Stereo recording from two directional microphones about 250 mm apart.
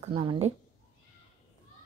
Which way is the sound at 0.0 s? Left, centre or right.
Right.